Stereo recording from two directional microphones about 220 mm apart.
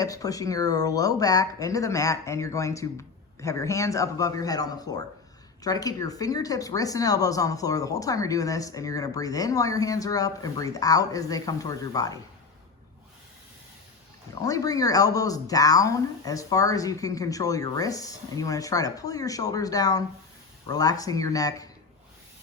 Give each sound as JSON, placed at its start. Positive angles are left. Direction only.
{"t": 0.0, "sound": "speech", "side_deg": 15}
{"t": 14.4, "sound": "speech", "side_deg": 15}